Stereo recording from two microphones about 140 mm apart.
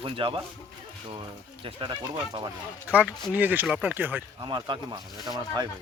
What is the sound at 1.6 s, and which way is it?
Speech, 40° right (ahead or behind).